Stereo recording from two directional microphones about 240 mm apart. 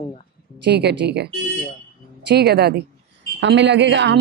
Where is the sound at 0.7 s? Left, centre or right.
Right.